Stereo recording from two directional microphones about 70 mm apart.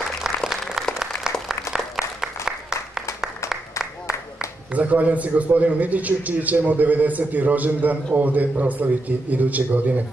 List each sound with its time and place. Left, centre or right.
0.2 s applause: centre
2.2 s applause: centre
4.7 s a man's voice: right